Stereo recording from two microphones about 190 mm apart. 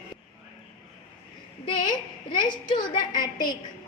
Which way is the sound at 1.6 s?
25° left (ahead or behind).